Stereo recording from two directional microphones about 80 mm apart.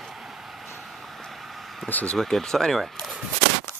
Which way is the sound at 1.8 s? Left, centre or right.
Left.